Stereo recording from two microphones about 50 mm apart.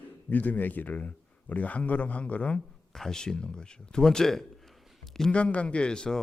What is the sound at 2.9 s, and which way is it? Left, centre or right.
A man's voice, centre.